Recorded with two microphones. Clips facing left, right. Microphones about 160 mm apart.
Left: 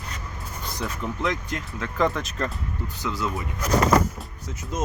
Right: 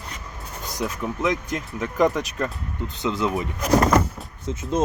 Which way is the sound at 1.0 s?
15° right (ahead or behind).